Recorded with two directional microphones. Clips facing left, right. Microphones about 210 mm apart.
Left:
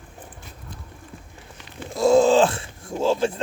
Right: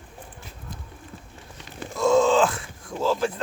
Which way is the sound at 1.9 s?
30° left (ahead or behind).